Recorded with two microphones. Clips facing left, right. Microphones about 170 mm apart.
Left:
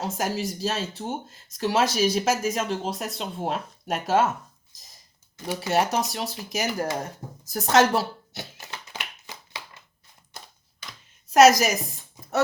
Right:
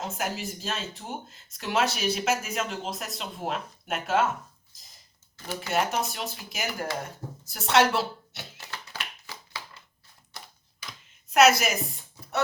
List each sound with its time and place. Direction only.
0.0 s speech: 35° left (ahead or behind)
5.5 s speech: 35° left (ahead or behind)
8.5 s a sound: 20° left (ahead or behind)
11.3 s speech: 40° left (ahead or behind)